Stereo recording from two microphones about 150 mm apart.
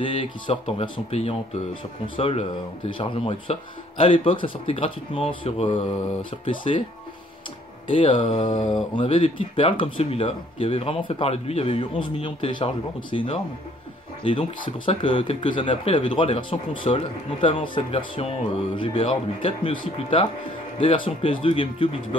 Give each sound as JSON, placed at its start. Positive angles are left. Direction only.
{"t": 0.0, "sound": "speech", "side_deg": 35}
{"t": 7.9, "sound": "speech", "side_deg": 35}